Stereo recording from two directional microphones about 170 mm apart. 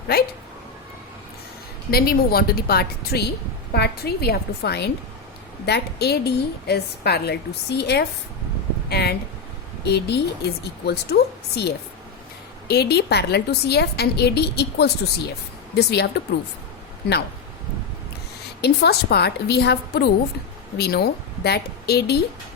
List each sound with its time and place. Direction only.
0.1 s a woman's voice: 65° left (ahead or behind)
1.9 s a woman's voice: 65° left (ahead or behind)
8.9 s a sound: 70° left (ahead or behind)
9.8 s a woman's voice: 75° left (ahead or behind)
18.6 s a woman's voice: 75° left (ahead or behind)